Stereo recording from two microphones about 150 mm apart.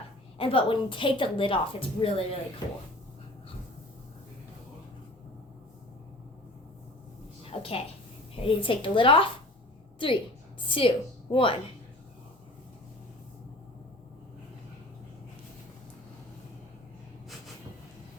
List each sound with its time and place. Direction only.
0.3 s a woman's voice: 35° left (ahead or behind)
7.5 s a sound: 40° left (ahead or behind)
8.4 s a woman's voice: 35° left (ahead or behind)